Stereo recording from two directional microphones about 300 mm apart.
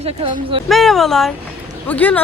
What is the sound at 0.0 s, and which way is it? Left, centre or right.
Speech, centre.